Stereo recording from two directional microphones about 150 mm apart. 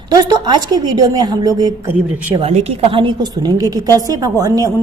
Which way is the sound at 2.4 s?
45° right (ahead or behind).